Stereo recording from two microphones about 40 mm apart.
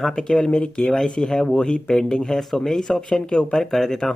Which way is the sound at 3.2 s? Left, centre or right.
Left.